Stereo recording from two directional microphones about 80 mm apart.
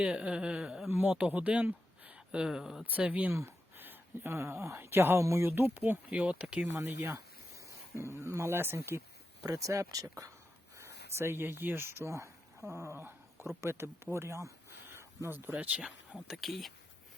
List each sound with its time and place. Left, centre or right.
0.0 s speech: centre
0.9 s speech: right
1.1 s speech: centre
2.9 s speech: centre
6.7 s speech: right
9.5 s speech: right
10.8 s speech: right; by 15.8 s centre
15.8 s speech: centre